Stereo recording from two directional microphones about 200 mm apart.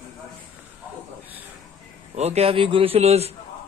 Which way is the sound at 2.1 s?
30° right (ahead or behind).